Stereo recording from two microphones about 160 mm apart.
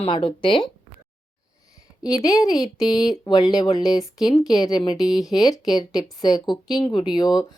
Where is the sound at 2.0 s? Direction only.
20° left (ahead or behind).